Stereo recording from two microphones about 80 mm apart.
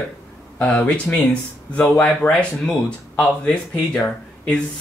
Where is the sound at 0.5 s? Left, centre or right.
Centre.